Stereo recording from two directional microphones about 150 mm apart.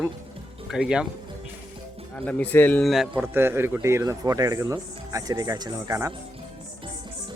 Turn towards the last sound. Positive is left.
turn(degrees=-25)  # may be behind; listen again after turning